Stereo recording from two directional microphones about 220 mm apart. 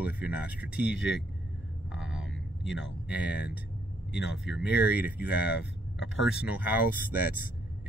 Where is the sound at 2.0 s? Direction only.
65° left (ahead or behind).